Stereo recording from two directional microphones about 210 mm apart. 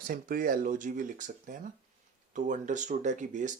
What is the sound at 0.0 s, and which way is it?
Speech, 40° right (ahead or behind).